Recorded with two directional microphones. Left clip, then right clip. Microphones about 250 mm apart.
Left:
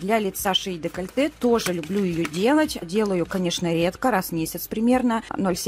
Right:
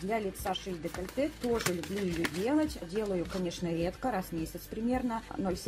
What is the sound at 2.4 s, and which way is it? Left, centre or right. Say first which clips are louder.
Speech: left 13 dB; left.